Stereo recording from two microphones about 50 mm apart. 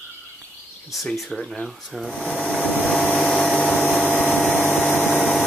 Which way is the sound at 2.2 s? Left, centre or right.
Left.